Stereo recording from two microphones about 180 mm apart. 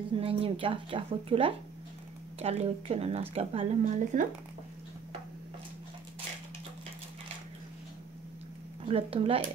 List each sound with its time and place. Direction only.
0.1 s a woman's voice: 30° right (ahead or behind)
8.8 s a woman's voice: 35° right (ahead or behind)